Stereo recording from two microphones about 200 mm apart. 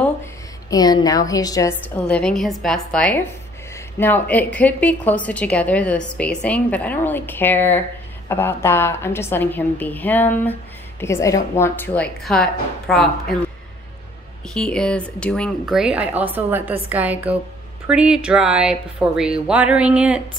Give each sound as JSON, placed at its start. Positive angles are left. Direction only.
{"t": 0.0, "sound": "a woman's voice", "side_deg": 15}
{"t": 2.0, "sound": "a woman's voice", "side_deg": 5}
{"t": 14.5, "sound": "speech", "side_deg": 5}